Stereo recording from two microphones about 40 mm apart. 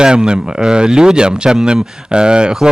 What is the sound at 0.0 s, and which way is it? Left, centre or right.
Speech, centre.